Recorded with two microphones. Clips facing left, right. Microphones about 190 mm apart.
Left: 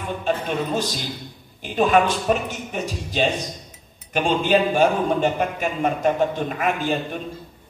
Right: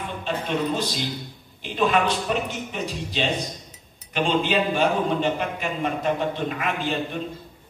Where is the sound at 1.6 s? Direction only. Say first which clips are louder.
Left 4 dB; 45° left (ahead or behind).